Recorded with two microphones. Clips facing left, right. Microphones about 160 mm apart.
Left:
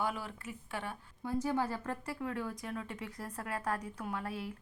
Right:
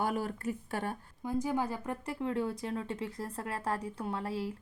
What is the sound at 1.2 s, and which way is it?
A woman's voice, 15° right (ahead or behind).